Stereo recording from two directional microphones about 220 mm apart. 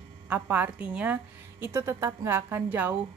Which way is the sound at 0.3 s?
10° right (ahead or behind).